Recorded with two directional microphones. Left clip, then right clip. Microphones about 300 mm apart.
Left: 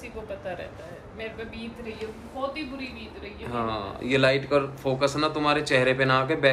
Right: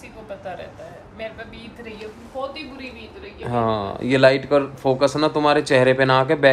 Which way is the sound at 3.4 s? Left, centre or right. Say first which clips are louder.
Right 8 dB; right.